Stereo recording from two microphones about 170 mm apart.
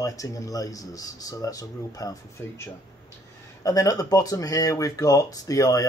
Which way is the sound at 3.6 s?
20° left (ahead or behind).